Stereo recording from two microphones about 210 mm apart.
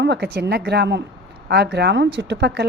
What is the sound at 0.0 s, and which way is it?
A woman's voice, 55° right (ahead or behind).